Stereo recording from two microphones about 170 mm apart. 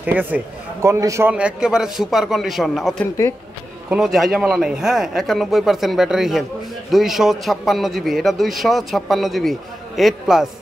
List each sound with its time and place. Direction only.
0.0 s a man's voice: 10° right (ahead or behind)
1.3 s a man's voice: 5° right (ahead or behind)